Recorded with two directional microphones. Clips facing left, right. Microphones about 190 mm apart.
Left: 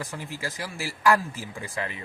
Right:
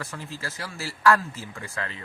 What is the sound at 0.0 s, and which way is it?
Speech, 15° left (ahead or behind).